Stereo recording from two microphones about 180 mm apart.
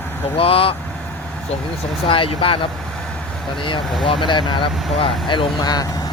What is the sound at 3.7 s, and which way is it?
Speech, 25° left (ahead or behind).